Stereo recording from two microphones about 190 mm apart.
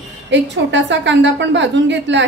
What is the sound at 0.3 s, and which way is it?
A woman's voice, 70° right (ahead or behind).